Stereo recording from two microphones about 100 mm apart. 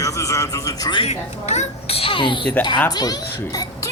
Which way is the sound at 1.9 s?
70° left (ahead or behind).